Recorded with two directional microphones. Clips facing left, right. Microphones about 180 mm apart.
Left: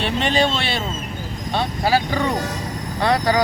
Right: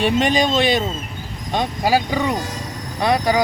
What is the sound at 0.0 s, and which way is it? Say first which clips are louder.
Speech: right 2 dB; 15° right (ahead or behind).